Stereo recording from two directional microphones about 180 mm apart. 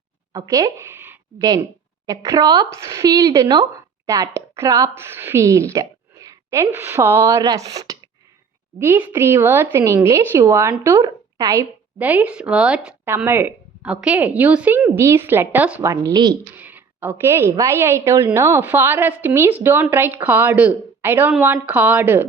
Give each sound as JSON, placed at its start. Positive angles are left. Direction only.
{"t": 0.3, "sound": "a woman's voice", "side_deg": -20}